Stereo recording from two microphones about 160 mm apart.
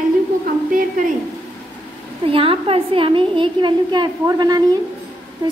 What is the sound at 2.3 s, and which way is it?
A woman's voice, 35° right (ahead or behind).